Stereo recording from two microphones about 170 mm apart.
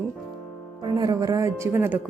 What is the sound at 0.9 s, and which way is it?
Speech, 20° right (ahead or behind).